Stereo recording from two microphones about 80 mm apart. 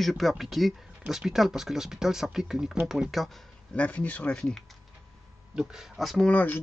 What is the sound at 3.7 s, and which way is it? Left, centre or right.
Speech, centre.